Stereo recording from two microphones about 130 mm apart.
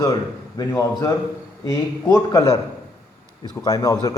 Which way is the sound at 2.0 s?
30° left (ahead or behind).